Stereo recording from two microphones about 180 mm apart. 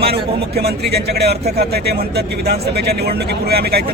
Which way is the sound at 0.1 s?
60° right (ahead or behind).